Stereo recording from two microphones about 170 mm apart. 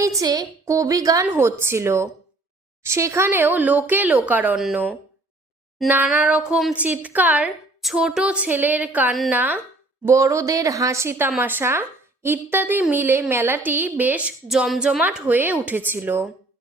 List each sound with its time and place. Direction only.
0.0 s a woman's voice: 20° right (ahead or behind)